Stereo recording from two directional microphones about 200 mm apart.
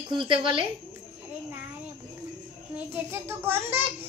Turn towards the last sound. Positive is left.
turn(degrees=-10)  # may be behind; listen again after turning